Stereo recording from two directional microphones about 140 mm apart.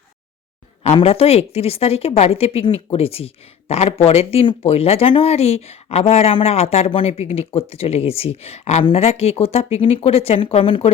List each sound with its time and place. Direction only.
0.9 s a woman's voice: 45° left (ahead or behind)